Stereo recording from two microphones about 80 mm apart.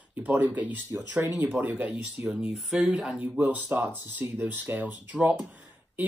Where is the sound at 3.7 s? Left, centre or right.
Right.